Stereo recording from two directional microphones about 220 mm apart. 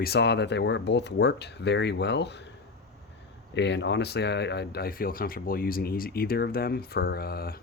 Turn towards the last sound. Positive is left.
turn(degrees=45)  # may be behind; listen again after turning